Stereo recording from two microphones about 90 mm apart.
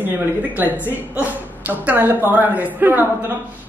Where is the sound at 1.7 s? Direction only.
20° right (ahead or behind).